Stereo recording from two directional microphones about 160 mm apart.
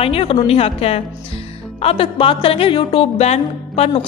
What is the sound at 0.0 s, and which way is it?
Speech, 35° left (ahead or behind).